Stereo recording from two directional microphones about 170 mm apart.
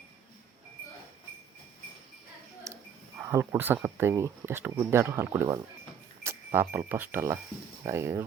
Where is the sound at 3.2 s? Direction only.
15° right (ahead or behind).